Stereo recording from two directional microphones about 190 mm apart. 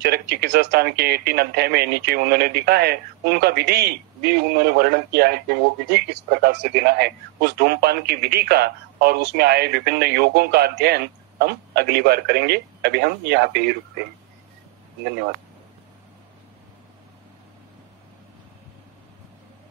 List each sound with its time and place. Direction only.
0.0 s speech: 60° right (ahead or behind)